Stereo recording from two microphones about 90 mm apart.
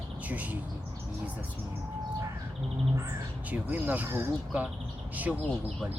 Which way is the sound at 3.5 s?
20° right (ahead or behind).